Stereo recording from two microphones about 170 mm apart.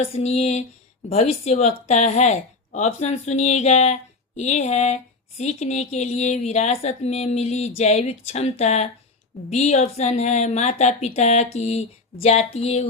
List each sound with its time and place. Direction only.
0.0 s speech: 40° left (ahead or behind)